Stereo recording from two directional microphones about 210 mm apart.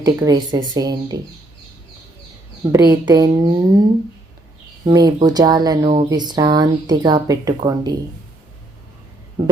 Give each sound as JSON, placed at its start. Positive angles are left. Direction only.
{"t": 0.0, "sound": "speech", "side_deg": -15}
{"t": 2.7, "sound": "speech", "side_deg": -20}
{"t": 4.9, "sound": "speech", "side_deg": -20}
{"t": 9.4, "sound": "speech", "side_deg": -15}